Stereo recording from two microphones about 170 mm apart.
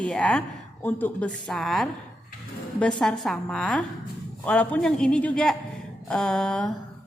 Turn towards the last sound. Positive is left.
turn(degrees=5)  # may be behind; listen again after turning